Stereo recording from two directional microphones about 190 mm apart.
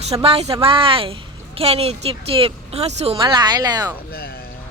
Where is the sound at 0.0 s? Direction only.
30° right (ahead or behind).